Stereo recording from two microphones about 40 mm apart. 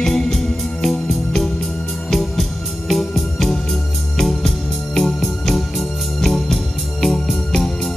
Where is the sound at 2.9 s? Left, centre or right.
Centre.